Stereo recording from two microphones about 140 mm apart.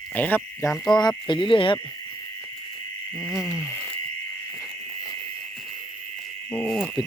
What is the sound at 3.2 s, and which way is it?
Cricket, centre (ahead or behind).